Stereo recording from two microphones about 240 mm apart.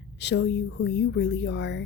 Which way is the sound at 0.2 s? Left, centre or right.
Left.